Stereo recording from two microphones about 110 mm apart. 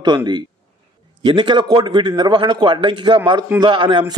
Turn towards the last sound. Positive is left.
turn(degrees=-45)  # may be behind; listen again after turning